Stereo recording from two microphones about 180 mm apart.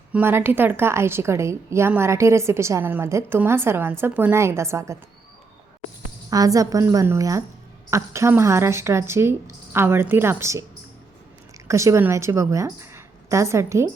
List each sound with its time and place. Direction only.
0.1 s a woman's voice: 10° right (ahead or behind)
6.3 s a woman's voice: 20° right (ahead or behind)
11.7 s a woman's voice: 15° right (ahead or behind)